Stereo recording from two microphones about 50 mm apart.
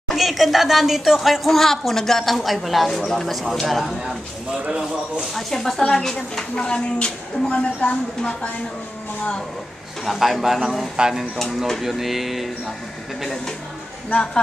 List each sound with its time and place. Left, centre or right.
0.1 s speech: centre
5.2 s a woman's voice: centre
10.0 s speech: centre
11.3 s speech: centre
14.1 s a woman's voice: centre